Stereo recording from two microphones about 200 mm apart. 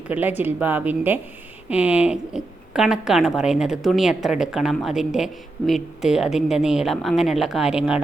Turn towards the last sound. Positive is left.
turn(degrees=-5)  # may be behind; listen again after turning